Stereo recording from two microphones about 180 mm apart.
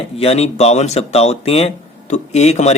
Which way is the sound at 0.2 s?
35° left (ahead or behind).